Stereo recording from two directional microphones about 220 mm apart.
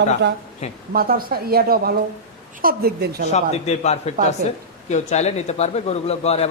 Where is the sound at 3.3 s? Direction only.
30° left (ahead or behind).